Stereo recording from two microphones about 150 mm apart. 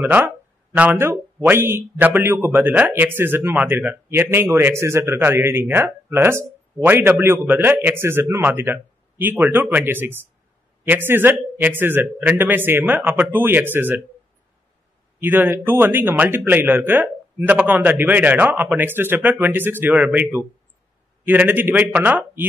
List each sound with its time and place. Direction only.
0.0 s a man's voice: 10° right (ahead or behind)
15.1 s a man's voice: 15° right (ahead or behind)